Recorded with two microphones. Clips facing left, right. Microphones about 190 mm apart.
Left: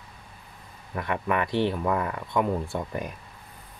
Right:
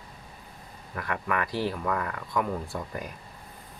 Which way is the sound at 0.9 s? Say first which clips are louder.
Left 3 dB; 25° left (ahead or behind).